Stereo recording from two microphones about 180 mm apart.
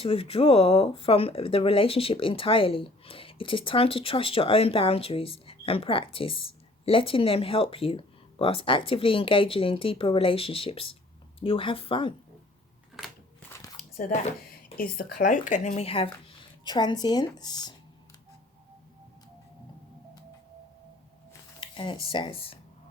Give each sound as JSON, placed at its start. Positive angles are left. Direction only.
{"t": 0.0, "sound": "speech", "side_deg": 30}
{"t": 13.9, "sound": "speech", "side_deg": 50}
{"t": 21.6, "sound": "a sound", "side_deg": 25}
{"t": 22.1, "sound": "speech", "side_deg": 30}